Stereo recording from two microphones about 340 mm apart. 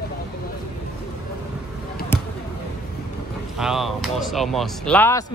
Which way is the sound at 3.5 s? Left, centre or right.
Centre.